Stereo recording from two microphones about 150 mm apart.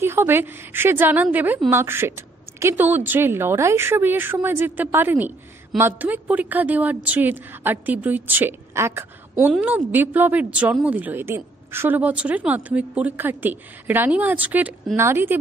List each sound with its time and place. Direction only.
0.0 s a woman's voice: 15° right (ahead or behind)